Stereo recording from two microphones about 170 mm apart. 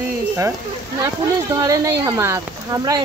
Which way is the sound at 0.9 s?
20° right (ahead or behind).